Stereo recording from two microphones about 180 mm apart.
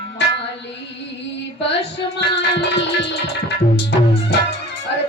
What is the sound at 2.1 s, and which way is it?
Music, 70° left (ahead or behind).